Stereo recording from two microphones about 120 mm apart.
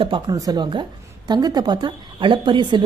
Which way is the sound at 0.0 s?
45° right (ahead or behind).